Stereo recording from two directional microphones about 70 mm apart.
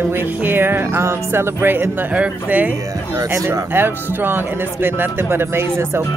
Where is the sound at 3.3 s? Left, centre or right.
Right.